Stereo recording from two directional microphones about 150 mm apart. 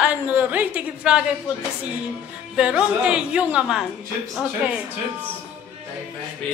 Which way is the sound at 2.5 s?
5° right (ahead or behind).